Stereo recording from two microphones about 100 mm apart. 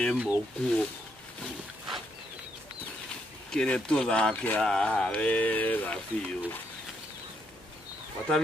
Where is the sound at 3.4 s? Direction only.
10° left (ahead or behind).